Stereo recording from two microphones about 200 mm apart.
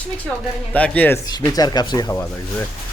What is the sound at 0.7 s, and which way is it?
Speech, 5° left (ahead or behind).